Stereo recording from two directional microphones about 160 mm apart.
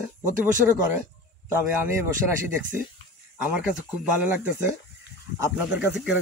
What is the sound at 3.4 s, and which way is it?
Speech, 5° right (ahead or behind).